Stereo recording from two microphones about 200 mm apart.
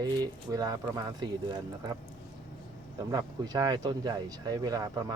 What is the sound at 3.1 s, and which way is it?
Speech, 20° right (ahead or behind).